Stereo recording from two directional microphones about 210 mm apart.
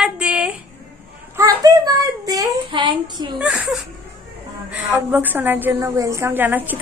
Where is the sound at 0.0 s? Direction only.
5° right (ahead or behind).